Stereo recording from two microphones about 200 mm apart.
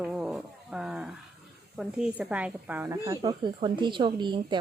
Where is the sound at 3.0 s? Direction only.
25° right (ahead or behind).